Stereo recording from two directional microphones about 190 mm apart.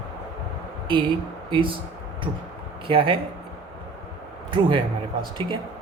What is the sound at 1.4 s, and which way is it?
Speech, 25° right (ahead or behind).